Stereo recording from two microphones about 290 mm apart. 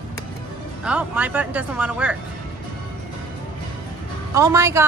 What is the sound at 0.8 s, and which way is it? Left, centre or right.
Speech, centre.